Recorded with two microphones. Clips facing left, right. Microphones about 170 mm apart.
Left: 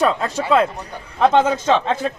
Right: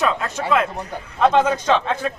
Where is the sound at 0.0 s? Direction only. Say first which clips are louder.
Left 3 dB; 35° left (ahead or behind).